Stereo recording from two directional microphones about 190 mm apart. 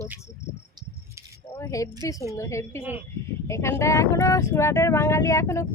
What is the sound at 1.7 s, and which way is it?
Speech, 15° left (ahead or behind).